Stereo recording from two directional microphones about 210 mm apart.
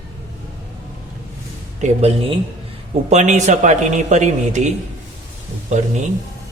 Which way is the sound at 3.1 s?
35° right (ahead or behind).